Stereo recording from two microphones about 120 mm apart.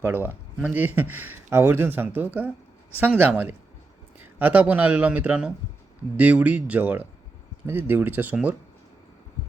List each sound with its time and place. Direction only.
0.0 s speech: 15° right (ahead or behind)